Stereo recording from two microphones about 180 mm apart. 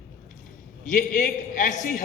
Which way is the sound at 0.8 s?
45° left (ahead or behind).